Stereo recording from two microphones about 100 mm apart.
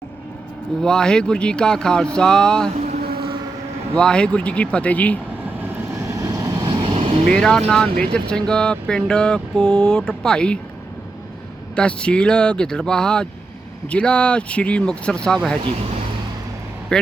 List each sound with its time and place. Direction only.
0.8 s speech: 5° left (ahead or behind)
3.9 s speech: 10° left (ahead or behind)
5.6 s vehicle: 30° right (ahead or behind)
6.6 s vehicle: 40° right (ahead or behind)
6.8 s vehicle: 65° right (ahead or behind)
7.3 s speech: 10° left (ahead or behind)
11.7 s speech: 10° left (ahead or behind)
16.9 s speech: 5° left (ahead or behind)